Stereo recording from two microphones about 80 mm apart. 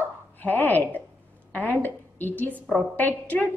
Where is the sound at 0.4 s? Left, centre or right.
Left.